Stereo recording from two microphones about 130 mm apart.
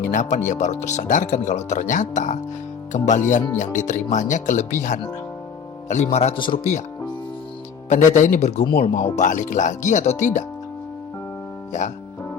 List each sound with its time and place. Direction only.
0.1 s speech: 75° left (ahead or behind)
5.9 s a man's voice: 60° left (ahead or behind)
6.3 s speech: 40° left (ahead or behind)
7.9 s speech: 70° left (ahead or behind)
11.7 s speech: 70° left (ahead or behind)